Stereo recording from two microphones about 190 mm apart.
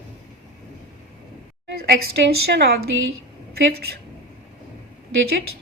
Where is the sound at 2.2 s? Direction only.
60° right (ahead or behind).